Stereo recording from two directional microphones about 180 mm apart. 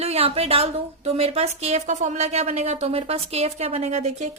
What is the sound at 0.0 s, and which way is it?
Speech, 35° right (ahead or behind).